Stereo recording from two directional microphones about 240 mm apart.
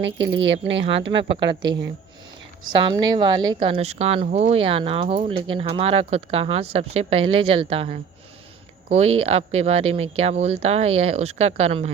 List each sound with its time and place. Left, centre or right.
0.0 s speech: right
0.8 s speech: right
2.7 s speech: right